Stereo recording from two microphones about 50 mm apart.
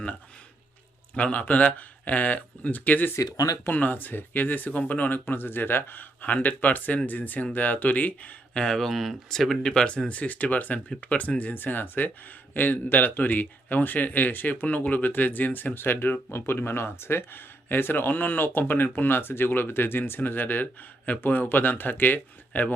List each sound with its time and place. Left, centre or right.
1.1 s speech: left
5.2 s speech: left
8.5 s speech: centre
8.9 s speech: centre; by 16.2 s left
16.3 s speech: left